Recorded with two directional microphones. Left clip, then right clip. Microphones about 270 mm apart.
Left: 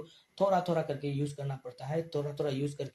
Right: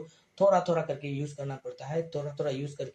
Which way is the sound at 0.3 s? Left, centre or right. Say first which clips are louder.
Right 4 dB; left.